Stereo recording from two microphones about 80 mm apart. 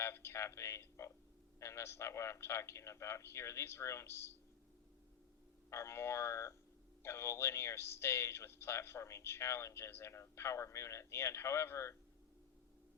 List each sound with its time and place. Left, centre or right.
0.0 s a man's voice: left
5.7 s speech: left